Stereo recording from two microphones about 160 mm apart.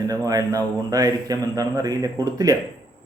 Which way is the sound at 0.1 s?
20° right (ahead or behind).